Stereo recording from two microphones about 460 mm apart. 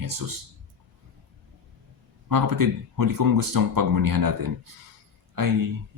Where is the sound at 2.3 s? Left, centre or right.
Right.